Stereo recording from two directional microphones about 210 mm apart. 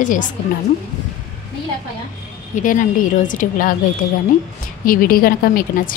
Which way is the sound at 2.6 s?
40° left (ahead or behind).